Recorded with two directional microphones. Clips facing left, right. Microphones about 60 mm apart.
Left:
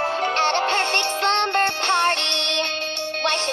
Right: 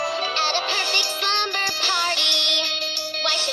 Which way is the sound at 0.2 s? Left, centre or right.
Left.